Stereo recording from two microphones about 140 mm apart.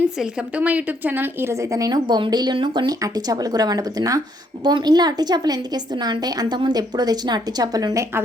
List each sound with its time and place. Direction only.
0.2 s a woman's voice: 10° right (ahead or behind); by 8.2 s 25° right (ahead or behind)